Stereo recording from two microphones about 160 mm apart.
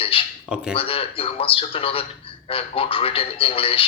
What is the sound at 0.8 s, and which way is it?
Speech, 35° left (ahead or behind).